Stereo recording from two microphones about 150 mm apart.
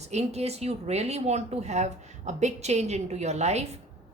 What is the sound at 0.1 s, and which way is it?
A woman's voice, 45° right (ahead or behind).